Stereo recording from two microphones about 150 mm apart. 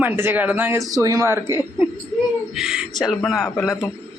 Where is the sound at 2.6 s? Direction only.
5° right (ahead or behind).